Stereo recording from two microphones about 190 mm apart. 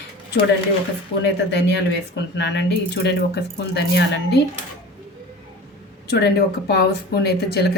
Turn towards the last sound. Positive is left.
turn(degrees=60)  # may be behind; listen again after turning